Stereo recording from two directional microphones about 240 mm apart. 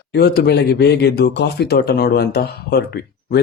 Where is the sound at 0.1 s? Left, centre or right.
Left.